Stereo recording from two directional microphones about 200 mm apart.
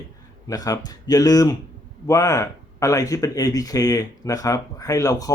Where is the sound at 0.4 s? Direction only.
20° left (ahead or behind).